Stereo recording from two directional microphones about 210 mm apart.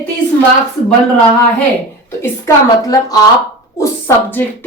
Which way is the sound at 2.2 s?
15° left (ahead or behind).